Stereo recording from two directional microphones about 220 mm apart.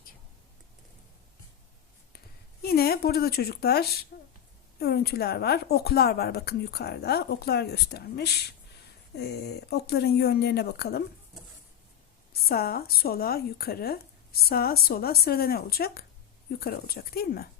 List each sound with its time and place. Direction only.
2.1 s a sound: 45° left (ahead or behind)
4.8 s speech: 45° left (ahead or behind)
12.3 s speech: 45° left (ahead or behind)